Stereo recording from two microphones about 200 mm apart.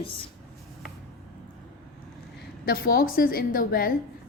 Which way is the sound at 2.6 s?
45° left (ahead or behind).